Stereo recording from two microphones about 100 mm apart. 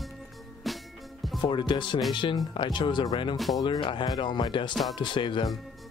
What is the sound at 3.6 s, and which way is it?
Speech, 50° left (ahead or behind).